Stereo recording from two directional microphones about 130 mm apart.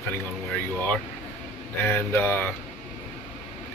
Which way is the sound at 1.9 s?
15° left (ahead or behind).